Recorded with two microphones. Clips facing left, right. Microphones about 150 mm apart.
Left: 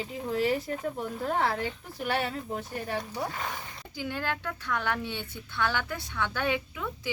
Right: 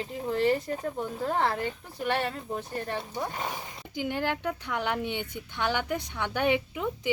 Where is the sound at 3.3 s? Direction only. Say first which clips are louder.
Right 2 dB; 20° right (ahead or behind).